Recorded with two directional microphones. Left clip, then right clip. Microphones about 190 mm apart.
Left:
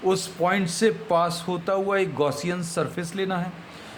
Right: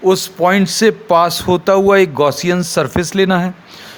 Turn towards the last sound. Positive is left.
turn(degrees=-55)  # may be behind; listen again after turning